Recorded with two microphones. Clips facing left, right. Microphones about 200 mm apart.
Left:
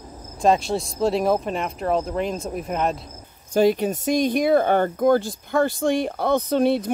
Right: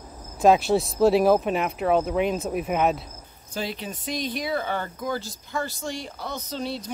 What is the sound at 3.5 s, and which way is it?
Speech, 45° left (ahead or behind).